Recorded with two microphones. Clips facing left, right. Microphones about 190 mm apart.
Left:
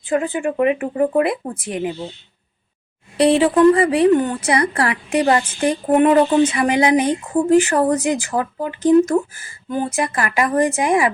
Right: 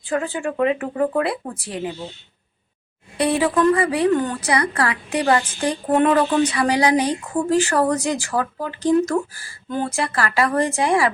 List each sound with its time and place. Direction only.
0.1 s a woman's voice: 20° left (ahead or behind)
3.2 s a woman's voice: 25° left (ahead or behind)